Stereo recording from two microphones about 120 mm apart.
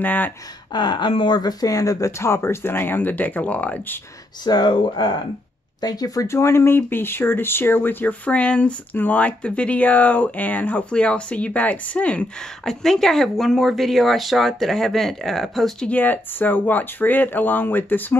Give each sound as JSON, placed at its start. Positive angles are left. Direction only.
{"t": 0.0, "sound": "speech", "side_deg": 15}
{"t": 0.7, "sound": "speech", "side_deg": 40}
{"t": 4.5, "sound": "speech", "side_deg": 35}
{"t": 15.9, "sound": "speech", "side_deg": 15}